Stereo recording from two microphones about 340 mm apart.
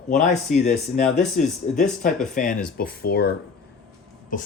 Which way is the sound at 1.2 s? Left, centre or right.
Centre.